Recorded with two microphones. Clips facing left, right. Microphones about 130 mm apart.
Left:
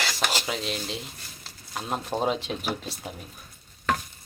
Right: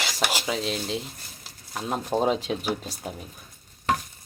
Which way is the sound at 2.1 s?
15° right (ahead or behind).